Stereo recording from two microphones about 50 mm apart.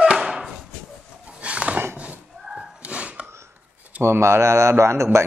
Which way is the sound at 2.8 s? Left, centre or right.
Right.